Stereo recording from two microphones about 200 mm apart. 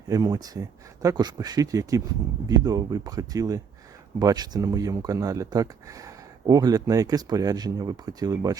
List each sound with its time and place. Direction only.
0.1 s speech: 20° right (ahead or behind)